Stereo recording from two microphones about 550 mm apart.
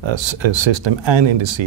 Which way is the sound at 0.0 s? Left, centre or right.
Right.